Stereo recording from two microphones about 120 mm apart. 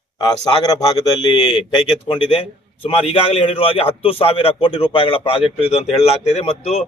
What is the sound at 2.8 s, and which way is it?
A man's voice, 50° left (ahead or behind).